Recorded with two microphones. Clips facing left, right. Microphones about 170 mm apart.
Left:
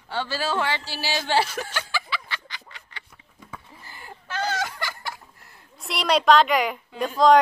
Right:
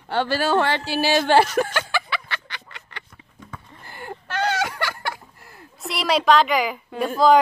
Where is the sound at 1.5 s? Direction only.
60° right (ahead or behind).